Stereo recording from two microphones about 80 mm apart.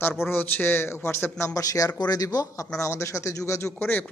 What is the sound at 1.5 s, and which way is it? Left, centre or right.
Speech, left.